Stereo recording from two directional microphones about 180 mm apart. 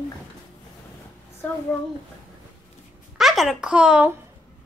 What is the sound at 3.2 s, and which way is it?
Speech, centre (ahead or behind).